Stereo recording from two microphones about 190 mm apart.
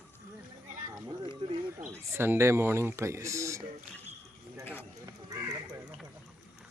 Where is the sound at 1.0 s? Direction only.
25° right (ahead or behind).